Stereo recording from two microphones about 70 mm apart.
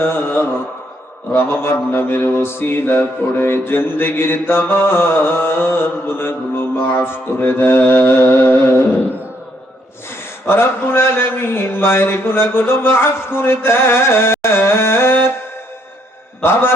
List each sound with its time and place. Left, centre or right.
0.0 s mantra: left
10.4 s speech: left
16.4 s mantra: left